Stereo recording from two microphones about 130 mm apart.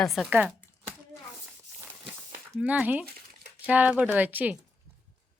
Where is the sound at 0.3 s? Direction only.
10° right (ahead or behind).